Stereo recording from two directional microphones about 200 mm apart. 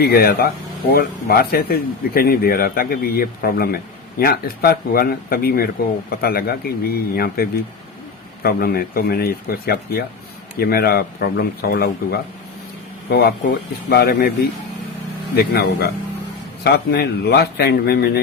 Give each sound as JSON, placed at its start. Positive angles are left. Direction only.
{"t": 0.0, "sound": "speech", "side_deg": 50}
{"t": 15.4, "sound": "speech", "side_deg": 55}